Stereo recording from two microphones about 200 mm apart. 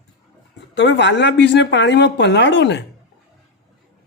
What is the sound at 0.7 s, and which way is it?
Speech, 60° left (ahead or behind).